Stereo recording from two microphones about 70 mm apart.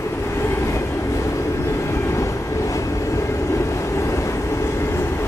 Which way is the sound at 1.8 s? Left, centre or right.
Left.